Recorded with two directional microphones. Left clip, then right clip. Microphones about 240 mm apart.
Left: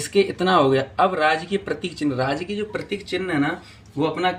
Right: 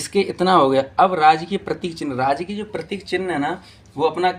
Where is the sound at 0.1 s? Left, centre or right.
Right.